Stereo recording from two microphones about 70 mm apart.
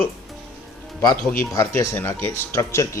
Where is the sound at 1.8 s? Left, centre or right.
Left.